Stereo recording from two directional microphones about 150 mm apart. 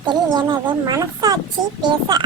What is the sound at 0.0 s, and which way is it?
A child's voice, 30° right (ahead or behind).